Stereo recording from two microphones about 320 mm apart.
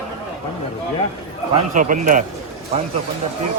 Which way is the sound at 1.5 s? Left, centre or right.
Right.